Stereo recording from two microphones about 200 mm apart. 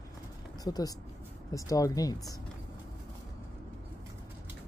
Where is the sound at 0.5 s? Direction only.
20° left (ahead or behind).